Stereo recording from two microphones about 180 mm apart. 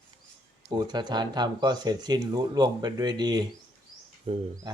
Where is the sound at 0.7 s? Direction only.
25° right (ahead or behind).